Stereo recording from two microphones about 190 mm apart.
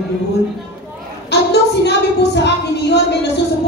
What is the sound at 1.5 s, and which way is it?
A woman's voice, 65° left (ahead or behind).